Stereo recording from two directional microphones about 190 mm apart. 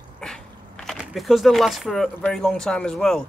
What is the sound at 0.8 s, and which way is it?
Speech, centre (ahead or behind).